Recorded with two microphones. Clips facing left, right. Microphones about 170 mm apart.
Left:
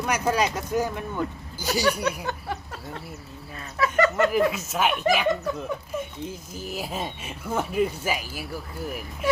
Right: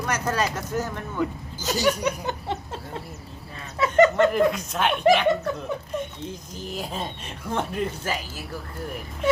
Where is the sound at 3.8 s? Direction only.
25° right (ahead or behind).